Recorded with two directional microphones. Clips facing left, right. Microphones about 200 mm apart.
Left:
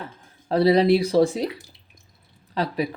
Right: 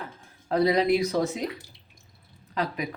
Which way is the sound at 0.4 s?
30° left (ahead or behind).